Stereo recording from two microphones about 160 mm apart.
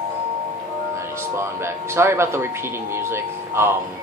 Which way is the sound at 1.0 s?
15° right (ahead or behind).